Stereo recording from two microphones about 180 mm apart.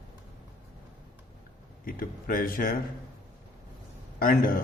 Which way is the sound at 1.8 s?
50° left (ahead or behind).